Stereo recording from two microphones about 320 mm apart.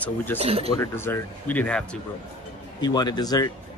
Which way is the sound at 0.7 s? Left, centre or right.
Centre.